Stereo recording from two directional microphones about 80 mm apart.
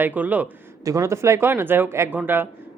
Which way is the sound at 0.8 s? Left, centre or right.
Right.